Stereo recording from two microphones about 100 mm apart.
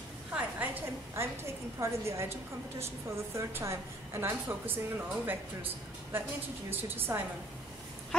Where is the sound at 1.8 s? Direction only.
25° right (ahead or behind).